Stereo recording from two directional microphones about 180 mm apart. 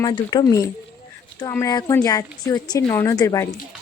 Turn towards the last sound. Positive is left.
turn(degrees=20)  # may be behind; listen again after turning